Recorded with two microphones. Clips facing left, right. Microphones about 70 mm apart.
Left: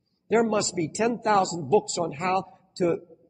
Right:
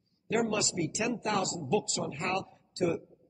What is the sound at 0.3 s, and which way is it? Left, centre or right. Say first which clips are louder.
A man's voice: left 7 dB; left.